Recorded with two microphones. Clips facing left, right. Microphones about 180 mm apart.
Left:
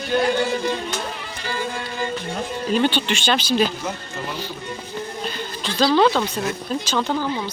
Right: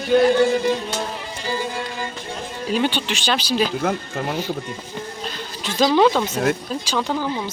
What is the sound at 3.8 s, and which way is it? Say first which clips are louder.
Speech: right 6 dB; 55° right (ahead or behind).